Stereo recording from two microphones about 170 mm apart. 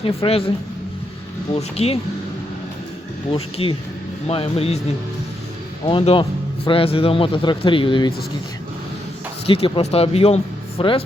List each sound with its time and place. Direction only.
0.2 s speech: 35° left (ahead or behind)
1.5 s speech: 35° left (ahead or behind)
3.3 s speech: 35° left (ahead or behind)
5.8 s speech: 30° left (ahead or behind)
9.5 s speech: 30° left (ahead or behind)